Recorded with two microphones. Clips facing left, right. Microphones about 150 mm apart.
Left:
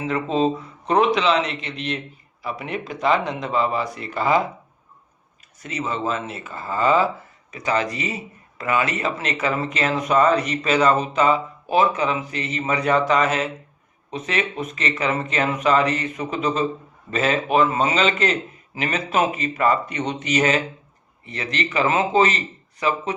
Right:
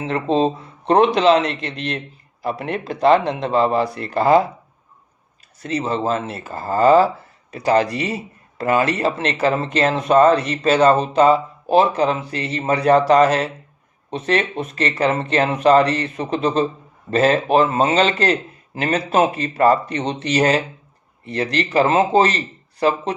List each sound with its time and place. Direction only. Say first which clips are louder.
0.0 s speech: right 3 dB; 30° right (ahead or behind)
2.6 s speech: right 4 dB; 10° left (ahead or behind)
2.8 s speech: right 6 dB; 35° right (ahead or behind)
5.6 s speech: right 5 dB; 30° right (ahead or behind)